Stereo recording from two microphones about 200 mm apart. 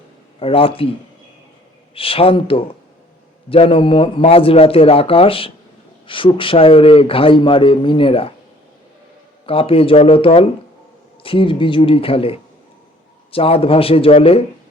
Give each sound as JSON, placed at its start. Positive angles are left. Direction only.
{"t": 0.3, "sound": "speech", "side_deg": 30}
{"t": 2.0, "sound": "speech", "side_deg": 30}
{"t": 9.5, "sound": "speech", "side_deg": 30}